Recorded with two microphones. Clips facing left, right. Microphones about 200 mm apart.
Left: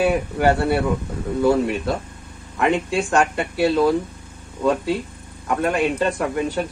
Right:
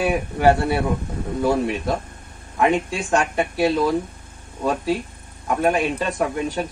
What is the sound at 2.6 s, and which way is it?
Speech, 65° left (ahead or behind).